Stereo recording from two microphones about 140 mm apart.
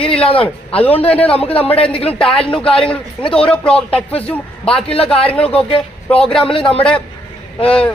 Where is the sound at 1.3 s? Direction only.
45° left (ahead or behind).